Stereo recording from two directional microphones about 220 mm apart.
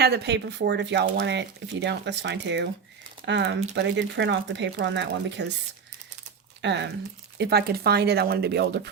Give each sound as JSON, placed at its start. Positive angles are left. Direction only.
{"t": 0.0, "sound": "speech", "side_deg": -50}
{"t": 6.6, "sound": "speech", "side_deg": -55}